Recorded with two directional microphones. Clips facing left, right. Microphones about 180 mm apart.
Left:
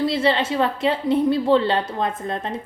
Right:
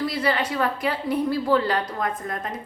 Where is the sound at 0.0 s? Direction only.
25° left (ahead or behind).